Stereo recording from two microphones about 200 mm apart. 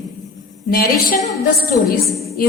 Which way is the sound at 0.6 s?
45° left (ahead or behind).